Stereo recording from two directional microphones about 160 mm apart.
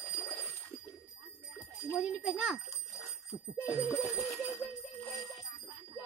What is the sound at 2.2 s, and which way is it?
Speech, centre (ahead or behind).